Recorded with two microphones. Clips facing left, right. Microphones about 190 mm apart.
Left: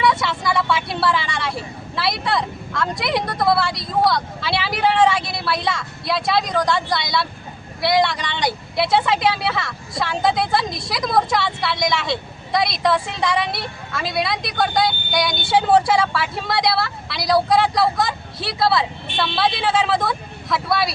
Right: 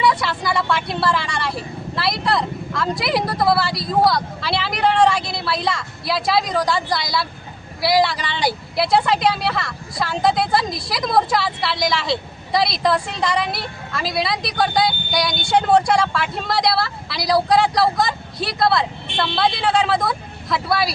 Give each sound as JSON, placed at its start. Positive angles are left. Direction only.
{"t": 0.0, "sound": "speech", "side_deg": 0}